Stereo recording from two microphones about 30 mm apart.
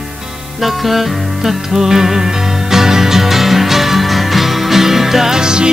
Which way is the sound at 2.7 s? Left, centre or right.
Centre.